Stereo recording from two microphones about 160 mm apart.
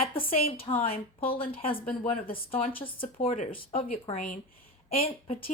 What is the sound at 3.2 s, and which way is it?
Speech, 50° left (ahead or behind).